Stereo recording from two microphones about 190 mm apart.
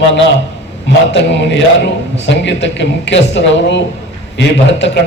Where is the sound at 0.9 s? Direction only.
70° left (ahead or behind).